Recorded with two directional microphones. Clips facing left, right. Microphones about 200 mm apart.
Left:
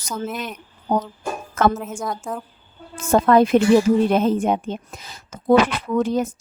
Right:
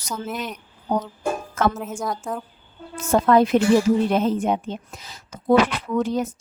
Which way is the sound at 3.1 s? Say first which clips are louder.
Left 2 dB; 50° left (ahead or behind).